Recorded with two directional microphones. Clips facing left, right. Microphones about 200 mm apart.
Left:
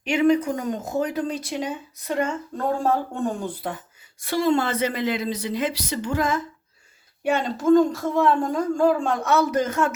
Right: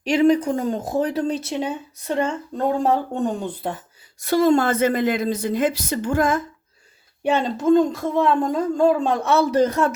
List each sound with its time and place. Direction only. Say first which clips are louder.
0.0 s a woman's voice: right 2 dB; 35° right (ahead or behind)
4.2 s a woman's voice: right 4 dB; 45° right (ahead or behind)
7.3 s speech: right 1 dB; 25° right (ahead or behind)